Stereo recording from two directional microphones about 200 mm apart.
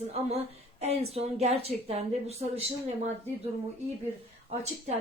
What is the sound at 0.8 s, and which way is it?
Speech, 35° right (ahead or behind).